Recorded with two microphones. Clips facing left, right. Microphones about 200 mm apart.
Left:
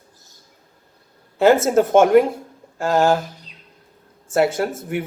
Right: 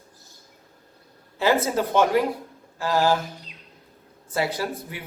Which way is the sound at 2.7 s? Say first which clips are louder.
Left 4 dB; 50° left (ahead or behind).